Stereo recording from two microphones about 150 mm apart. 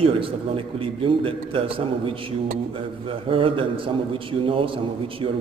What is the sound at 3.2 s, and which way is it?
A man's voice, 35° right (ahead or behind).